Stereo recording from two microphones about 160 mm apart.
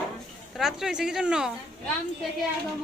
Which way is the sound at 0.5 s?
5° right (ahead or behind).